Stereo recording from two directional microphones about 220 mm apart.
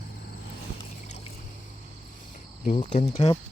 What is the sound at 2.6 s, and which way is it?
Speech, 35° left (ahead or behind).